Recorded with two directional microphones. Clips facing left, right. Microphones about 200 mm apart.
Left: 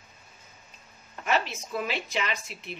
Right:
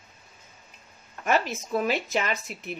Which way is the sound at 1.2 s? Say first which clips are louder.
Right 3 dB; 45° right (ahead or behind).